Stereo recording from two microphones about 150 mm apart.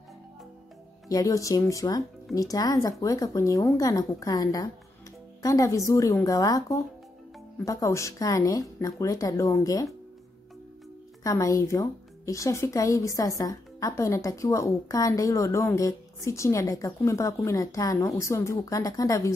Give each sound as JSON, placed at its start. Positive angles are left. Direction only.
{"t": 1.0, "sound": "speech", "side_deg": 25}
{"t": 11.2, "sound": "speech", "side_deg": 20}